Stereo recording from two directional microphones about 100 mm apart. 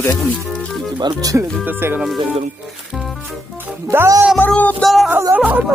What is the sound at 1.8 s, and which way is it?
Music, 25° right (ahead or behind).